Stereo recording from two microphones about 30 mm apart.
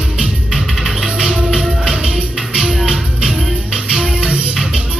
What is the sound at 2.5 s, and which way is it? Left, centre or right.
Music, centre.